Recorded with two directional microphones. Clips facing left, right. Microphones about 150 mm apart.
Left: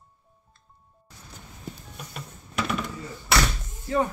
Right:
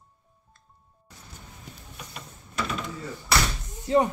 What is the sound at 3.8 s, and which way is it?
Speech, 20° right (ahead or behind).